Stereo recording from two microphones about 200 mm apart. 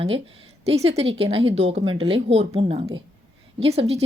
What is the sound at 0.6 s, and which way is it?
A woman's voice, 30° right (ahead or behind).